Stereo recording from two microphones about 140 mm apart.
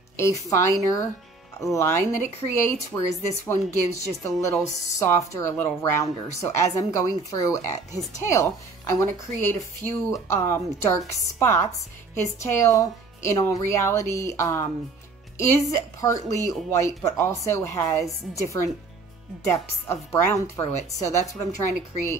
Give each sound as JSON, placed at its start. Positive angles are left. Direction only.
{"t": 0.2, "sound": "a woman's voice", "side_deg": 20}
{"t": 19.4, "sound": "a woman's voice", "side_deg": 20}